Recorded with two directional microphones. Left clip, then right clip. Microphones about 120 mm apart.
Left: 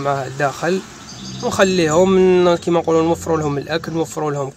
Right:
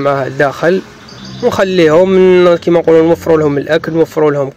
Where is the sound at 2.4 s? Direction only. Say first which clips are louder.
Right 7 dB; 20° right (ahead or behind).